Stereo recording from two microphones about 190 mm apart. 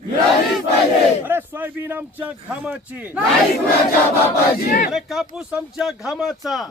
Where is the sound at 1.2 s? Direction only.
10° right (ahead or behind).